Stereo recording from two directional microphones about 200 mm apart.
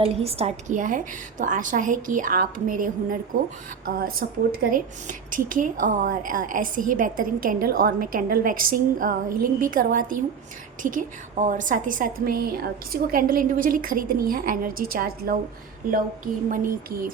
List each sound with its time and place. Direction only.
0.0 s a woman's voice: 30° right (ahead or behind)